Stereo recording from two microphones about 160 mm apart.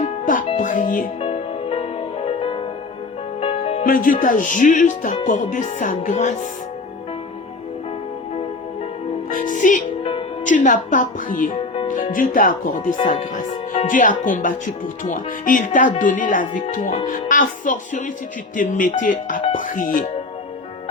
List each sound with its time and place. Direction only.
0.0 s music: 55° left (ahead or behind)
1.2 s music: 35° left (ahead or behind)
3.8 s speech: 60° left (ahead or behind)
9.3 s music: 55° left (ahead or behind)
10.0 s music: 35° left (ahead or behind)
10.4 s speech: 50° left (ahead or behind)
11.5 s music: 35° left (ahead or behind)
12.1 s speech: 55° left (ahead or behind)